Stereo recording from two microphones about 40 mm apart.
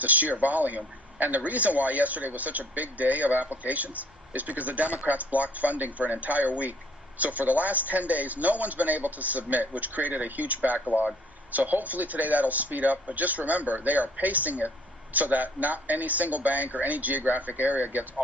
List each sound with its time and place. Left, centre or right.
0.0 s a man's voice: right